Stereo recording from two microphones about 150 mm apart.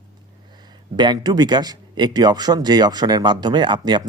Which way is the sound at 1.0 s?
30° right (ahead or behind).